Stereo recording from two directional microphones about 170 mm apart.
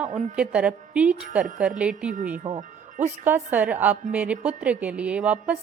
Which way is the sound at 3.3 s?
10° right (ahead or behind).